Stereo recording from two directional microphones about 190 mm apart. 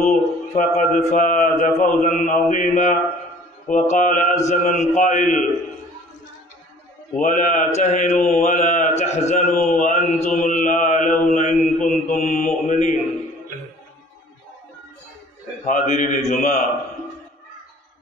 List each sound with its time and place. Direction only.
0.0 s mantra: 40° left (ahead or behind)
7.2 s mantra: 40° left (ahead or behind)
12.6 s music: 40° left (ahead or behind)
15.6 s mantra: 40° left (ahead or behind)